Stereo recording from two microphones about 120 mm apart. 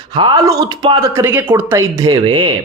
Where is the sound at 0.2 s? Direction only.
35° right (ahead or behind); by 1.5 s 20° right (ahead or behind).